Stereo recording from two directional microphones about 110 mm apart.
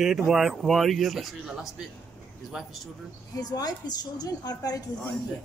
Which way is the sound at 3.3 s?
35° left (ahead or behind).